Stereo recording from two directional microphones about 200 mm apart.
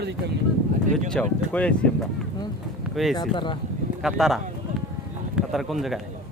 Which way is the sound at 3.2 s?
25° left (ahead or behind).